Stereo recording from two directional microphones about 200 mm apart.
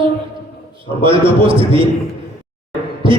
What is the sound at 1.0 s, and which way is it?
Speech, 25° right (ahead or behind).